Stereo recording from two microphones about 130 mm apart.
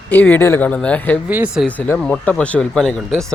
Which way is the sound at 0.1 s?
15° left (ahead or behind).